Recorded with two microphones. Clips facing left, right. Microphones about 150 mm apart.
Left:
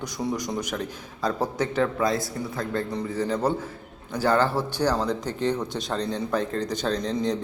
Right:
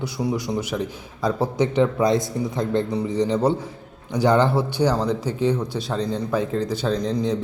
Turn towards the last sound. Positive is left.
turn(degrees=-5)  # may be behind; listen again after turning